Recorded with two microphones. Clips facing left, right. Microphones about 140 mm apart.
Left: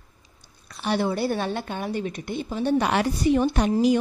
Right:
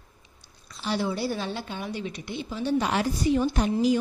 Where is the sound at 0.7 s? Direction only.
60° left (ahead or behind).